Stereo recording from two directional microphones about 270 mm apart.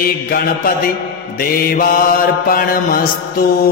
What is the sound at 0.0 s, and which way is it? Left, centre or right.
Mantra, left.